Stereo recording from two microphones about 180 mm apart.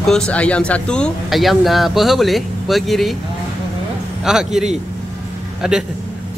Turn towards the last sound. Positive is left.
turn(degrees=-5)  # may be behind; listen again after turning